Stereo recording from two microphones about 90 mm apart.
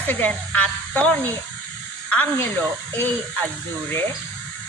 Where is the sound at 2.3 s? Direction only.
25° left (ahead or behind).